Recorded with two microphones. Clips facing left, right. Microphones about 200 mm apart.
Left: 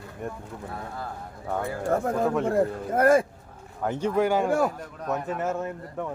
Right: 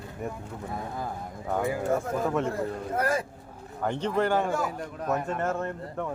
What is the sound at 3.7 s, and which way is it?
Speech, 5° left (ahead or behind).